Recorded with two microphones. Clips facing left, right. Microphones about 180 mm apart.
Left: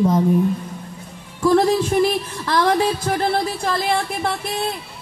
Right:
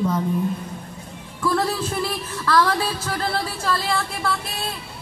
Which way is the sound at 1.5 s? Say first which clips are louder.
Left 9 dB; 15° left (ahead or behind).